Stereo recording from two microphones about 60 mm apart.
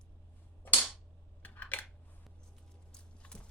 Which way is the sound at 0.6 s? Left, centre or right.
Left.